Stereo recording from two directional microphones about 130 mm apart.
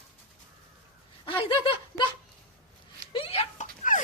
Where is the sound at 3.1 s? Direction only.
45° left (ahead or behind).